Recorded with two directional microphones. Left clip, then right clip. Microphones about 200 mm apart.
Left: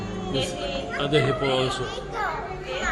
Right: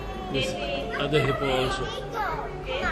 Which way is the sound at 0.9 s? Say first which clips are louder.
Left 2 dB; 20° left (ahead or behind).